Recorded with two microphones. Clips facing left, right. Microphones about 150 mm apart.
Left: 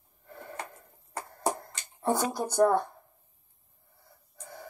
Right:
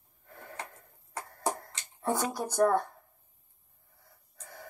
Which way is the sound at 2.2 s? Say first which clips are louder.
Left 2 dB; 30° left (ahead or behind).